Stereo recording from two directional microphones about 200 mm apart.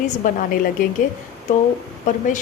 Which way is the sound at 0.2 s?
40° left (ahead or behind).